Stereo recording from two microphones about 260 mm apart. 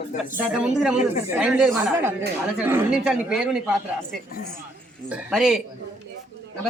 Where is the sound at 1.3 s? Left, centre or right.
Centre.